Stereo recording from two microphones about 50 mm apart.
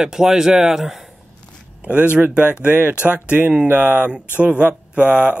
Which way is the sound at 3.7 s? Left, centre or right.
Right.